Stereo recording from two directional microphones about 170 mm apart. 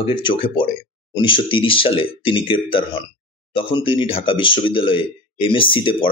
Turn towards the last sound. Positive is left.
turn(degrees=30)  # may be behind; listen again after turning